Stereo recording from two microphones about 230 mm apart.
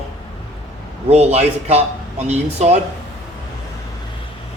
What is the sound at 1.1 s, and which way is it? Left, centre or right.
Speech, right.